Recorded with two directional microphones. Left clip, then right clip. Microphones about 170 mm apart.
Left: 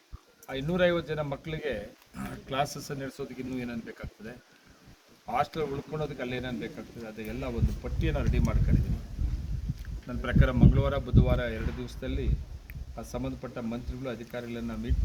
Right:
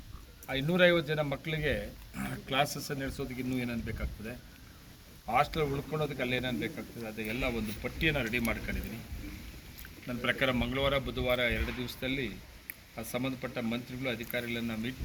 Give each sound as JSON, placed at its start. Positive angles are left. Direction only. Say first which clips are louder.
{"t": 0.7, "sound": "a man's voice", "louder": "right 1 dB", "side_deg": 15}
{"t": 10.1, "sound": "a man's voice", "louder": "right 1 dB", "side_deg": 10}